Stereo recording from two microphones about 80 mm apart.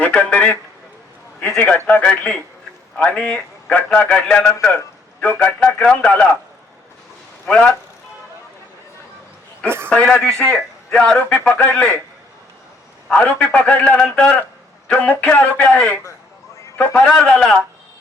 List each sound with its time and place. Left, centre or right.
0.0 s a man's voice: centre
7.4 s a man's voice: centre
9.6 s a man's voice: right
9.9 s a man's voice: centre
13.1 s a man's voice: centre